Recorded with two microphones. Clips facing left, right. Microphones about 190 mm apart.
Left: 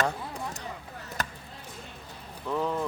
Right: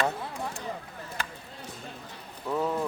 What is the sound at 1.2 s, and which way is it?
Basketball bounce, 40° left (ahead or behind).